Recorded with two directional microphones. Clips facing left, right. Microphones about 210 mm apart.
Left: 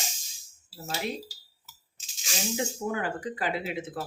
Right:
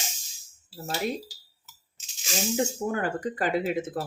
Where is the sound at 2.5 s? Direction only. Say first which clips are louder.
Right 3 dB; 45° right (ahead or behind).